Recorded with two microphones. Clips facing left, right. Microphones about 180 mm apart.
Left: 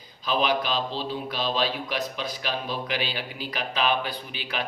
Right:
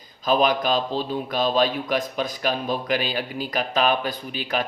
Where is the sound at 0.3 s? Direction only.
45° right (ahead or behind).